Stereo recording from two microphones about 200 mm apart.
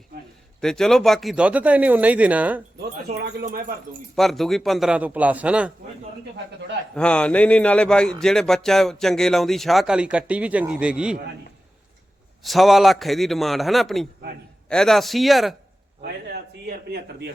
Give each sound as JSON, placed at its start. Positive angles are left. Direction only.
{"t": 0.6, "sound": "speech", "side_deg": 0}
{"t": 4.1, "sound": "speech", "side_deg": 0}
{"t": 6.9, "sound": "speech", "side_deg": 5}
{"t": 12.4, "sound": "speech", "side_deg": 0}
{"t": 16.0, "sound": "a sound", "side_deg": -55}